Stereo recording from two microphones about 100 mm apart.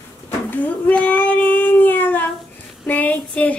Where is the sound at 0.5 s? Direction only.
15° left (ahead or behind).